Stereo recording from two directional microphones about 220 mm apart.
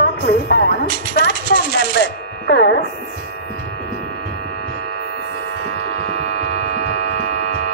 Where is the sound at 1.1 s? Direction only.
50° left (ahead or behind).